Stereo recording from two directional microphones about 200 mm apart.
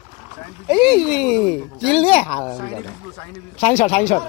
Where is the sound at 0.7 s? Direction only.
20° left (ahead or behind).